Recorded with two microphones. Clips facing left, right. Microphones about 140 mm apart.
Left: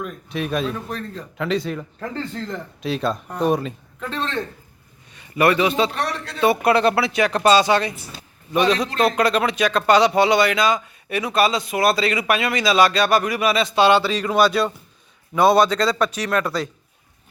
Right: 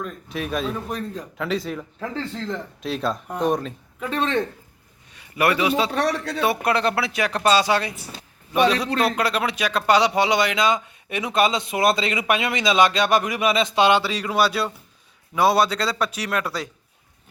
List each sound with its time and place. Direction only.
0.0 s speech: centre (ahead or behind)
4.0 s a man's voice: 10° right (ahead or behind)